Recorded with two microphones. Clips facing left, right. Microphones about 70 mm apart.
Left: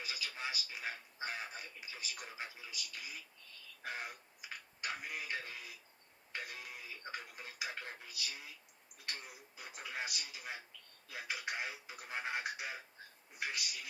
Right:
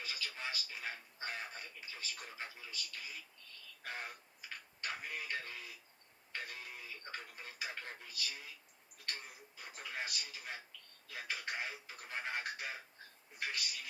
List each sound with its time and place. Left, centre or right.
0.0 s speech: centre